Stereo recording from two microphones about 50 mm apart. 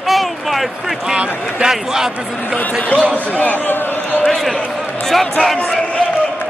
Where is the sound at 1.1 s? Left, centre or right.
Centre.